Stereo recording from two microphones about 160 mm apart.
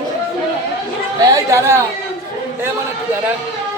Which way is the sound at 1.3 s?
15° right (ahead or behind).